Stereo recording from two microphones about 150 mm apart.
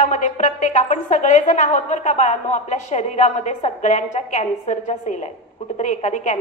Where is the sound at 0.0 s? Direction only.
55° left (ahead or behind).